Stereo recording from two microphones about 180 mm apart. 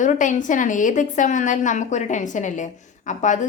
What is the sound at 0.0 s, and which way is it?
A woman's voice, 45° left (ahead or behind).